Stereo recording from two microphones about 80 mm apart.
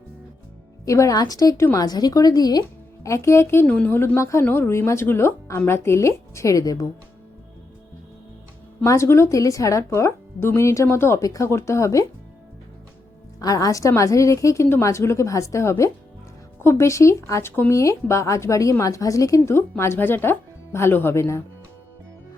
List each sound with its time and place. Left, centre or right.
0.9 s speech: left
3.1 s speech: left
3.7 s a woman's voice: centre
3.9 s speech: left
8.8 s speech: left
13.4 s speech: left
17.5 s speech: left
17.7 s speech: left